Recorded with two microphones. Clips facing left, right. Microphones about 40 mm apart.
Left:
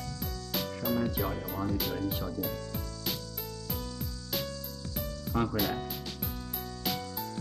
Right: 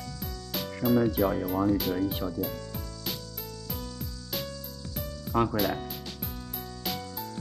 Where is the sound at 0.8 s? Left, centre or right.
Centre.